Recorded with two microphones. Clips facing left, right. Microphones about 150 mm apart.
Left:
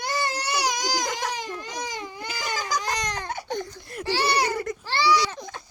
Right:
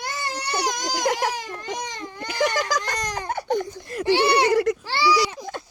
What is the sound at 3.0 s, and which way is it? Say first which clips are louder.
Baby cry: right 2 dB; 10° right (ahead or behind).